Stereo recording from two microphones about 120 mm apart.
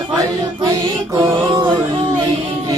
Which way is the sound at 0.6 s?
30° right (ahead or behind).